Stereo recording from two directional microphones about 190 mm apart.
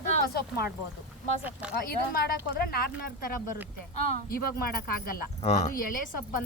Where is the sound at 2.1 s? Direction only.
50° left (ahead or behind).